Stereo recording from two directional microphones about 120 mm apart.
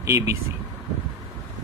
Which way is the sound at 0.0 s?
25° right (ahead or behind).